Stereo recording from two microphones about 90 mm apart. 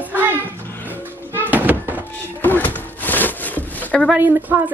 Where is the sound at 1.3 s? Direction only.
20° right (ahead or behind).